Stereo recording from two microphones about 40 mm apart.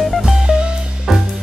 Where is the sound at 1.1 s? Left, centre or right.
Centre.